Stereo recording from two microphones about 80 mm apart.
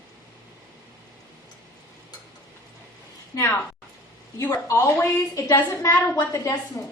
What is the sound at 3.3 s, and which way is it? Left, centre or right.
A woman's voice, left.